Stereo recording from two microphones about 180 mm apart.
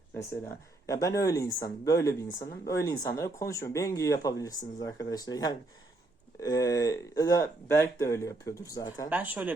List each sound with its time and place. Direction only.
0.2 s speech: 15° left (ahead or behind)
9.0 s speech: 10° right (ahead or behind)